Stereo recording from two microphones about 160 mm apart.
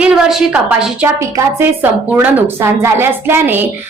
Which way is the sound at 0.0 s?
Centre (ahead or behind).